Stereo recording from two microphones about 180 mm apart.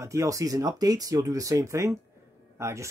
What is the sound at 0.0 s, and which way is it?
Speech, 15° right (ahead or behind).